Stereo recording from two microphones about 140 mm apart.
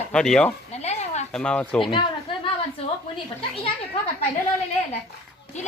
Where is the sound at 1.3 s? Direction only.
5° left (ahead or behind).